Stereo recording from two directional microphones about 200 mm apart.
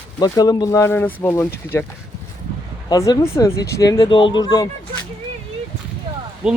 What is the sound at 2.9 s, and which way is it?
Speech, 15° left (ahead or behind).